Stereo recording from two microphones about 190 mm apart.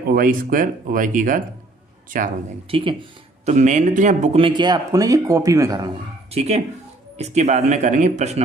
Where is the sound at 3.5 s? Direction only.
40° right (ahead or behind); by 5.9 s 20° right (ahead or behind).